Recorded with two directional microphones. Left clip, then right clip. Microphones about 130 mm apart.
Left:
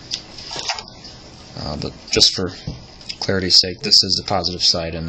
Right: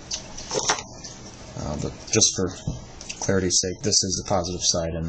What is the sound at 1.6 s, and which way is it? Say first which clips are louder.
Speech: left 4 dB; 15° left (ahead or behind).